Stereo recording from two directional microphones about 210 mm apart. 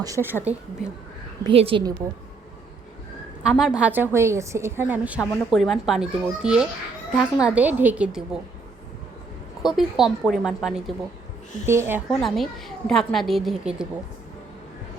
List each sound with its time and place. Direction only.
0.0 s a woman's voice: 15° right (ahead or behind)
1.5 s a woman's voice: 25° right (ahead or behind)
3.4 s a woman's voice: 5° right (ahead or behind)
9.6 s a woman's voice: centre (ahead or behind)